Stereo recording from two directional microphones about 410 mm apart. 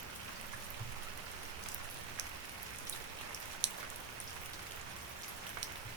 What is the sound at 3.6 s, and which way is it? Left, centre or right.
Raindrop, right.